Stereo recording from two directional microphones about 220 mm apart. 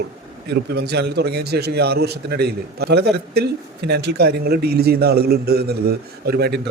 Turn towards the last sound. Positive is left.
turn(degrees=-45)  # may be behind; listen again after turning